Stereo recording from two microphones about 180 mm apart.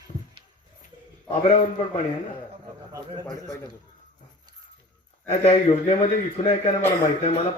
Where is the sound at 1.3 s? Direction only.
35° left (ahead or behind).